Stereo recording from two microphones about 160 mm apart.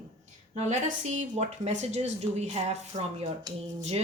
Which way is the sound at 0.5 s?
45° right (ahead or behind).